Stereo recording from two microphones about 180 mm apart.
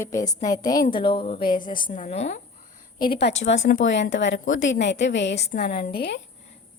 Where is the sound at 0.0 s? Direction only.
20° left (ahead or behind).